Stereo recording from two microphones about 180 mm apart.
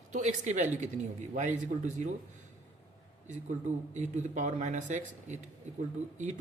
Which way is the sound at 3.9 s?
40° right (ahead or behind).